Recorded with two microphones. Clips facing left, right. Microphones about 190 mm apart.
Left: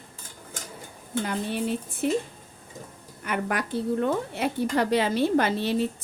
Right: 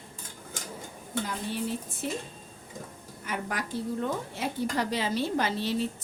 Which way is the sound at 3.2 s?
65° left (ahead or behind).